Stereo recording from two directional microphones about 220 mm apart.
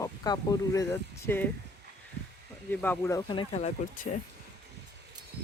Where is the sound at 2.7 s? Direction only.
10° left (ahead or behind); by 4.0 s 30° left (ahead or behind).